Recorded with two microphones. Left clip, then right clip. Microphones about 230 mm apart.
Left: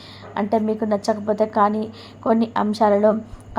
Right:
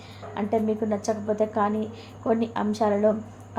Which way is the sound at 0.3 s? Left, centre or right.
Left.